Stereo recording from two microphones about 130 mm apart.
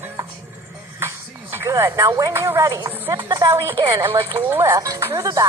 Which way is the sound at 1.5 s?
25° right (ahead or behind).